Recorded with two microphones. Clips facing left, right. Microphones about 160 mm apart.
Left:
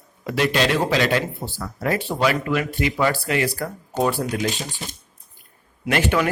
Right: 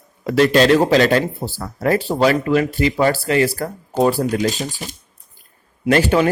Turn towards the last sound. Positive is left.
turn(degrees=-35)  # may be behind; listen again after turning